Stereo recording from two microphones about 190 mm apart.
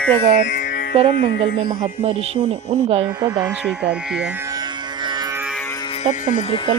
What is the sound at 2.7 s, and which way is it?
Speech, 30° right (ahead or behind).